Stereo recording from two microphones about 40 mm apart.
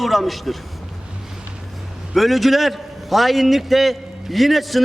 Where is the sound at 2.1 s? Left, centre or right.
Centre.